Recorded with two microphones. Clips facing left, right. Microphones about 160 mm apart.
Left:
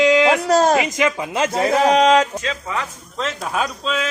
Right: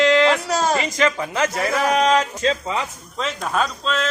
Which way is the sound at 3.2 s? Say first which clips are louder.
Even; 5° left (ahead or behind).